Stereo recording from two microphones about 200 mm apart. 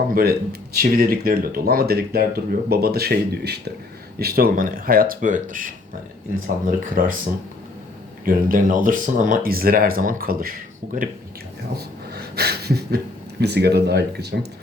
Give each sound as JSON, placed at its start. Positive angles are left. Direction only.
{"t": 0.1, "sound": "speech", "side_deg": -50}
{"t": 6.7, "sound": "speech", "side_deg": -45}
{"t": 8.2, "sound": "speech", "side_deg": -45}
{"t": 12.1, "sound": "a sound", "side_deg": -55}
{"t": 13.4, "sound": "speech", "side_deg": -55}